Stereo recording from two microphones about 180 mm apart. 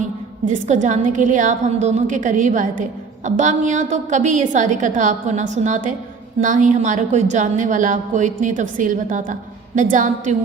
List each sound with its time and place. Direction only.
0.4 s a woman's voice: 45° right (ahead or behind)